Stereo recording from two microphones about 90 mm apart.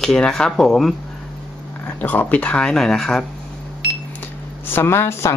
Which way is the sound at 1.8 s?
20° left (ahead or behind).